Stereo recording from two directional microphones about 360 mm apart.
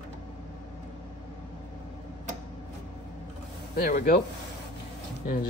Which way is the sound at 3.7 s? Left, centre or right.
Left.